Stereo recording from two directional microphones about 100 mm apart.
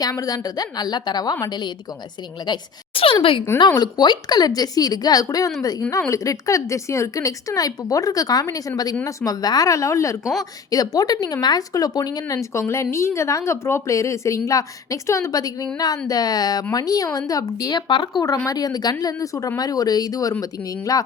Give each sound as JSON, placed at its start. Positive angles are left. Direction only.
{"t": 0.0, "sound": "speech", "side_deg": 40}
{"t": 2.9, "sound": "speech", "side_deg": 65}
{"t": 3.8, "sound": "speech", "side_deg": 45}
{"t": 18.2, "sound": "speech", "side_deg": 40}